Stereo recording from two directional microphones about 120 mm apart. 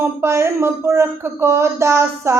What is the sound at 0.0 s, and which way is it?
Speech, 20° right (ahead or behind).